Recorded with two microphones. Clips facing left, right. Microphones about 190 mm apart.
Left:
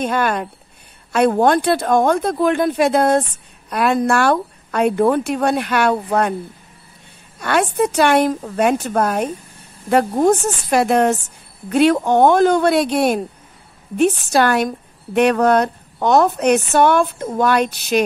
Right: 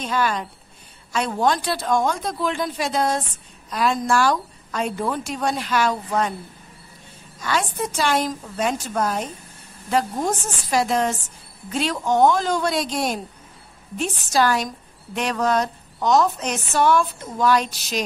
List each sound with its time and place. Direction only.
0.0 s a woman's voice: 55° left (ahead or behind)
7.3 s a woman's voice: 60° left (ahead or behind)